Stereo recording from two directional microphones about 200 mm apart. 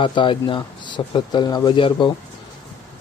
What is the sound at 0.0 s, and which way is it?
Speech, 25° left (ahead or behind).